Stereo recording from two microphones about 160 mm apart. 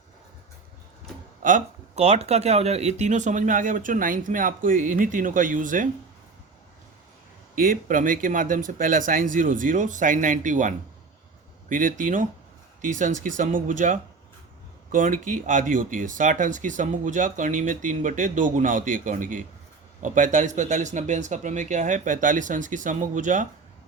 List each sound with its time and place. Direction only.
1.4 s speech: 55° right (ahead or behind)
7.5 s speech: 60° right (ahead or behind)